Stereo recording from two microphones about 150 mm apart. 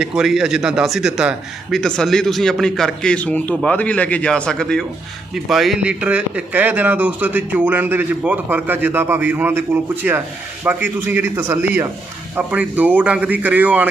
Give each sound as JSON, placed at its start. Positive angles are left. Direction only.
{"t": 0.0, "sound": "a man's voice", "side_deg": -5}